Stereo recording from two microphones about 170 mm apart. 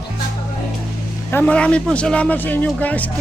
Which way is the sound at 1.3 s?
10° left (ahead or behind).